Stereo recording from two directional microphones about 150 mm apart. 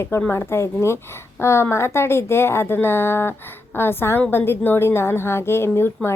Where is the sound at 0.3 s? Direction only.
15° left (ahead or behind).